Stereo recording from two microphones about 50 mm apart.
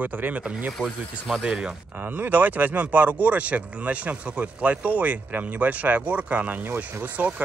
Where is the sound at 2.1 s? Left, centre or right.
Right.